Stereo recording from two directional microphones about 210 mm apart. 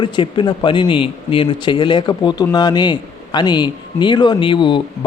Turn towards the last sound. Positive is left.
turn(degrees=20)  # may be behind; listen again after turning